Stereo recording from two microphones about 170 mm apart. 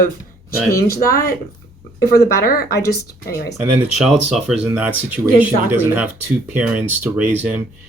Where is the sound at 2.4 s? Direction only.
60° left (ahead or behind).